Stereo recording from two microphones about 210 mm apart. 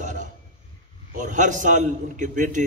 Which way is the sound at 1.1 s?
35° right (ahead or behind).